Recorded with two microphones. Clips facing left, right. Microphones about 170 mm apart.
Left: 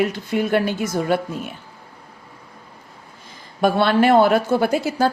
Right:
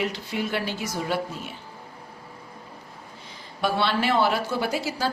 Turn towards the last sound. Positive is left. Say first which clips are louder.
# left 8 dB
turn(degrees=50)  # may be behind; listen again after turning